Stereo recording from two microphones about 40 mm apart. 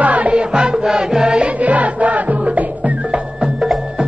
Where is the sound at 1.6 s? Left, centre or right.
Right.